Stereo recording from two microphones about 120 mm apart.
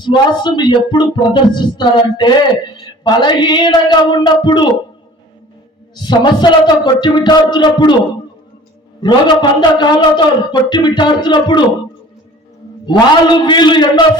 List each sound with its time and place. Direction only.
0.0 s a man's voice: 40° left (ahead or behind)
6.1 s a man's voice: 35° left (ahead or behind)
9.0 s a man's voice: 40° left (ahead or behind)
12.8 s a man's voice: 40° left (ahead or behind)